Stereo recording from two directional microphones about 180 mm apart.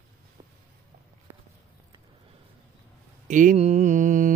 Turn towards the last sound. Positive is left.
turn(degrees=-45)  # may be behind; listen again after turning